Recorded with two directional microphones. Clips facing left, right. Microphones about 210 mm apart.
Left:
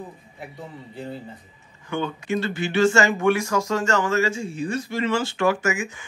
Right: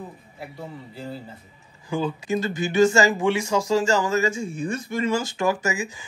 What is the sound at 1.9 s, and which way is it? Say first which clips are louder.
Speech: right 1 dB; 30° right (ahead or behind).